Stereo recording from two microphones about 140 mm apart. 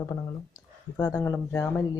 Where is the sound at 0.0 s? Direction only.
20° left (ahead or behind).